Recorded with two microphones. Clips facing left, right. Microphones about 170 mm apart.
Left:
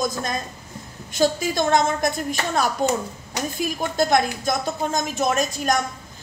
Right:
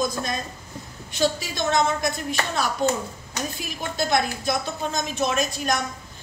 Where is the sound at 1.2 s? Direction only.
50° left (ahead or behind).